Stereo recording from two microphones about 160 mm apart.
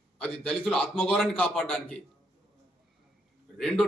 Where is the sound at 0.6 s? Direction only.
5° left (ahead or behind).